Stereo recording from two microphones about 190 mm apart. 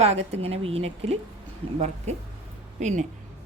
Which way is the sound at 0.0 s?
35° right (ahead or behind).